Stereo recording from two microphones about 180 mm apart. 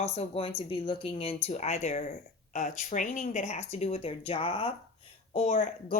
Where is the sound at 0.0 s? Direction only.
35° left (ahead or behind).